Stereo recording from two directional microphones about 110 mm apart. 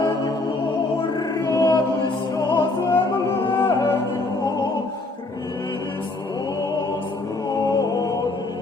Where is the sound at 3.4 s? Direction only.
45° left (ahead or behind).